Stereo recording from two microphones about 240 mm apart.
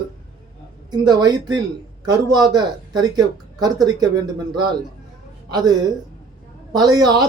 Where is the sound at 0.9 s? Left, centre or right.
Centre.